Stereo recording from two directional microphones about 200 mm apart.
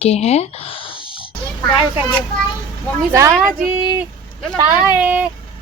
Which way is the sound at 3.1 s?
15° right (ahead or behind).